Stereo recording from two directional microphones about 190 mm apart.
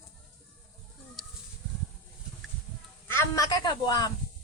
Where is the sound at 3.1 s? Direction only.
15° left (ahead or behind).